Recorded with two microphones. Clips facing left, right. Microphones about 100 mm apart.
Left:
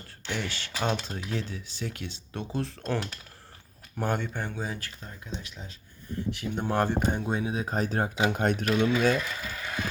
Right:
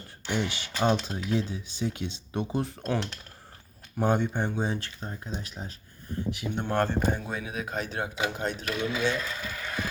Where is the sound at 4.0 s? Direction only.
20° right (ahead or behind); by 5.8 s 45° right (ahead or behind).